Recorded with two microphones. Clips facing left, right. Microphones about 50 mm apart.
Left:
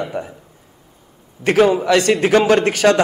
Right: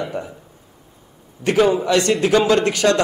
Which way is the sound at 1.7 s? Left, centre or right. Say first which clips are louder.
Left 2 dB; left.